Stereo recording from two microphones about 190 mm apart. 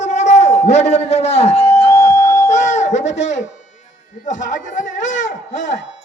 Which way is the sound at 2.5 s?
40° left (ahead or behind).